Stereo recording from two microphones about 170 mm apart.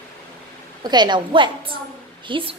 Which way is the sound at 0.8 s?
25° right (ahead or behind).